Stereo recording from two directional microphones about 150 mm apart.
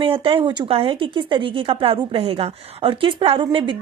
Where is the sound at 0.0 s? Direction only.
35° right (ahead or behind).